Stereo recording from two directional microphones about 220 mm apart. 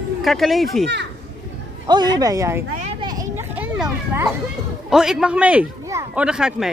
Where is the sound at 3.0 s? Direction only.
15° right (ahead or behind).